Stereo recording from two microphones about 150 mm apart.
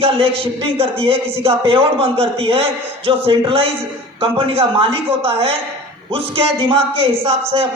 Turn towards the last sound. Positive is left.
turn(degrees=-40)  # may be behind; listen again after turning